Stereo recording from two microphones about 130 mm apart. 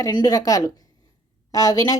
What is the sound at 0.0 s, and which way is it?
Speech, 30° left (ahead or behind).